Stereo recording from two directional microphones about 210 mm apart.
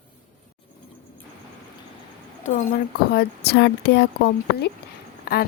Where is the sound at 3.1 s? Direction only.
50° left (ahead or behind).